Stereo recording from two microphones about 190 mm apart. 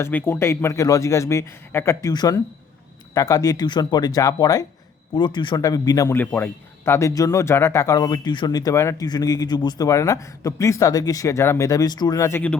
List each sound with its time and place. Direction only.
0.0 s a man's voice: 10° left (ahead or behind)